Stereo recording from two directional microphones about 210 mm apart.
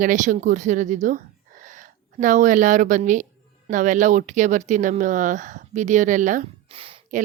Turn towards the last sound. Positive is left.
turn(degrees=-25)  # may be behind; listen again after turning